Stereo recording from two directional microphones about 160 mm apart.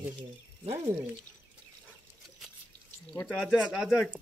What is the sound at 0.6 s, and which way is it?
Speech, 35° right (ahead or behind).